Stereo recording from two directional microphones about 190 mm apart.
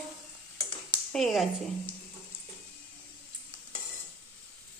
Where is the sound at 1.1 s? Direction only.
Centre (ahead or behind).